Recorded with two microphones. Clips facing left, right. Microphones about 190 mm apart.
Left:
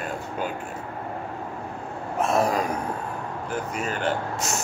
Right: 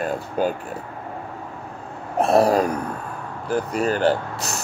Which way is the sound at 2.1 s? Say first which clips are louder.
Right 6 dB; 35° right (ahead or behind).